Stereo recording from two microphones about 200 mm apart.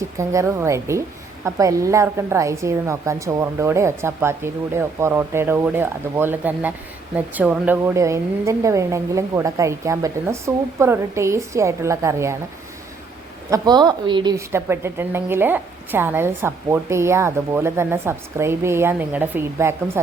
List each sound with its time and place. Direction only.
0.2 s a woman's voice: 15° right (ahead or behind)
13.5 s a woman's voice: 20° right (ahead or behind)